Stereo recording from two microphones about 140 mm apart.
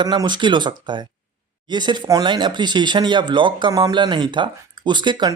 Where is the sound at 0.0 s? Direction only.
30° right (ahead or behind).